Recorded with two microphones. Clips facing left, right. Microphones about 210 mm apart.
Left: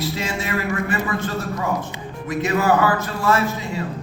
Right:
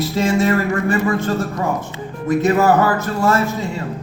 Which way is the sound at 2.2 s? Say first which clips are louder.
Right 5 dB; 45° right (ahead or behind).